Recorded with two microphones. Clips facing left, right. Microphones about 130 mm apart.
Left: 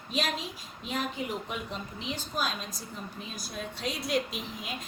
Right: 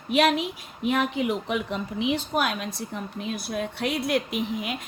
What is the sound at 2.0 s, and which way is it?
A woman's voice, 65° right (ahead or behind).